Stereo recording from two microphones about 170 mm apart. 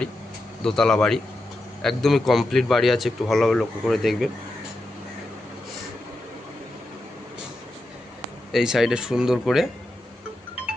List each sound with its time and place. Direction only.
0.6 s a man's voice: 5° left (ahead or behind)
8.5 s a man's voice: centre (ahead or behind)